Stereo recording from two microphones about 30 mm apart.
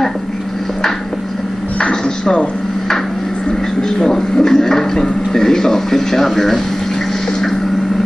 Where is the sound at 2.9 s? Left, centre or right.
Centre.